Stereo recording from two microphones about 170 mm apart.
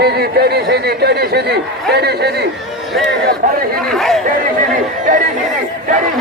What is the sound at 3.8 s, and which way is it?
Speech, centre (ahead or behind).